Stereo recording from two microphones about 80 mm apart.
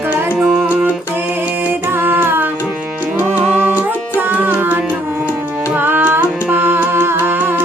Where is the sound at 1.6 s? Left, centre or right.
Right.